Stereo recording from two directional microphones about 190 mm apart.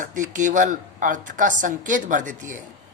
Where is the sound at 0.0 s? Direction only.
40° right (ahead or behind).